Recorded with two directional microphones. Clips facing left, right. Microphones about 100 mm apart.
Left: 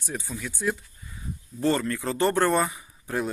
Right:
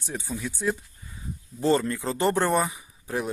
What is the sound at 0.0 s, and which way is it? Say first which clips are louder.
Speech: right 2 dB; 25° right (ahead or behind).